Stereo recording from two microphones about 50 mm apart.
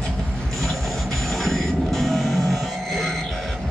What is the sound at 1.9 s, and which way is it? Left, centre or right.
Music, centre.